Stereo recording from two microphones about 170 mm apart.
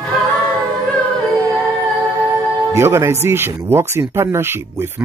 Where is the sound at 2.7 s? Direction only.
15° right (ahead or behind).